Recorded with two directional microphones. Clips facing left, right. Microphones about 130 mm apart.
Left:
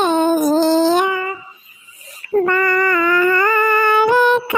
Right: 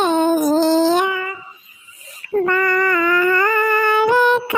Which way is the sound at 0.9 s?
40° left (ahead or behind).